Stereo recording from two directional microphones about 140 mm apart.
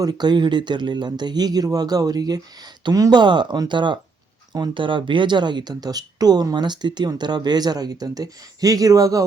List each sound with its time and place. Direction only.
0.0 s speech: 30° right (ahead or behind)